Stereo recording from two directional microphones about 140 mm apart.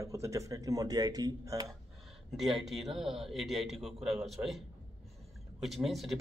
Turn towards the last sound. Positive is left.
turn(degrees=0)  # may be behind; listen again after turning